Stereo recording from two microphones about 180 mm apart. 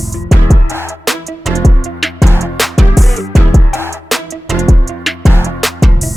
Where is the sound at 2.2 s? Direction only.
15° left (ahead or behind).